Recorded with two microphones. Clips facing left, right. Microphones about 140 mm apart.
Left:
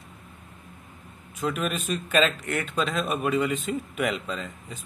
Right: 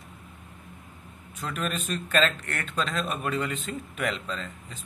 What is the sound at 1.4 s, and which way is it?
Speech, 10° left (ahead or behind).